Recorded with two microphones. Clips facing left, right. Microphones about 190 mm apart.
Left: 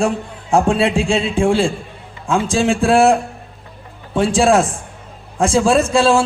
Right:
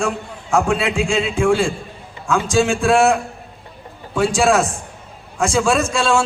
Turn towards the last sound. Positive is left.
turn(degrees=30)  # may be behind; listen again after turning